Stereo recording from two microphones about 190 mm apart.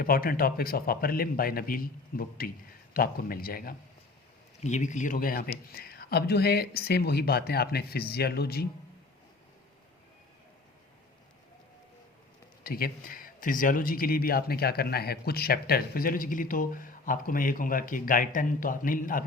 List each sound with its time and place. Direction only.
0.0 s a man's voice: 50° left (ahead or behind)
4.6 s speech: 40° left (ahead or behind); by 8.6 s 55° left (ahead or behind)
12.6 s a man's voice: 50° left (ahead or behind)